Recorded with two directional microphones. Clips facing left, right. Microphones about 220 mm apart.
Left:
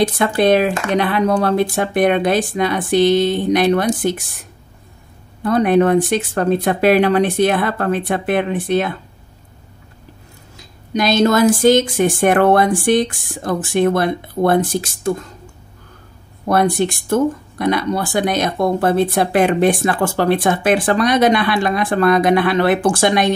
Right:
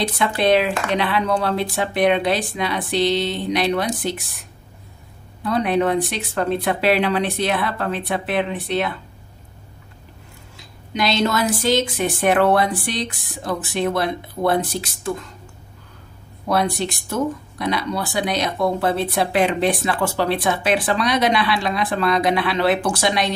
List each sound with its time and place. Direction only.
0.0 s speech: 45° left (ahead or behind)
5.4 s speech: 50° left (ahead or behind)
10.9 s speech: 45° left (ahead or behind)
16.4 s speech: 50° left (ahead or behind)